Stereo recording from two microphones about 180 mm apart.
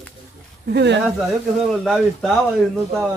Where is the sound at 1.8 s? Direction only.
Centre (ahead or behind).